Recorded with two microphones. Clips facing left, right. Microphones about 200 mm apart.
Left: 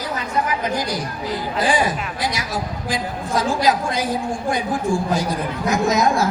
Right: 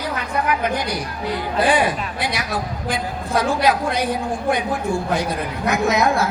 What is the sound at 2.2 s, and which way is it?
A woman's voice, 60° right (ahead or behind).